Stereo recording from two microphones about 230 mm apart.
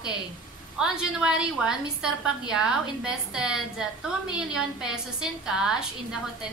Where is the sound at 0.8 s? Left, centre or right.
Centre.